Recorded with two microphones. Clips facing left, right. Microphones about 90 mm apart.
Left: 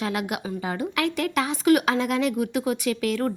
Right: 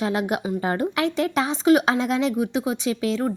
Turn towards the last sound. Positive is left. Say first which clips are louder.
# right 1 dB
turn(degrees=-25)  # may be behind; listen again after turning